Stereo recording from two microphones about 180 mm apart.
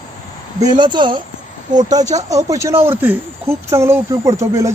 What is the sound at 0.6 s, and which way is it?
Speech, 25° right (ahead or behind).